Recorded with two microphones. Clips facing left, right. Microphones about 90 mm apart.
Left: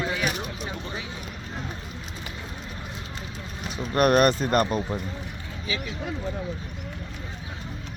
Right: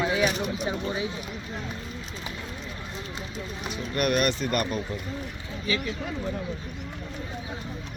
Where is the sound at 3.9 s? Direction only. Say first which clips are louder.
Left 6 dB; 40° left (ahead or behind).